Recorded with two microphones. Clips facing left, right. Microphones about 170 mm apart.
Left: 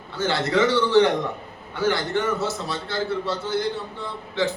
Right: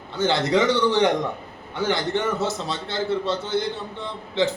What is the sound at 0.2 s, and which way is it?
A man's voice, 20° right (ahead or behind).